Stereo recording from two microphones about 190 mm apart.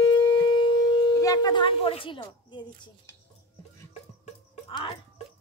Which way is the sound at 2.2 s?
25° left (ahead or behind).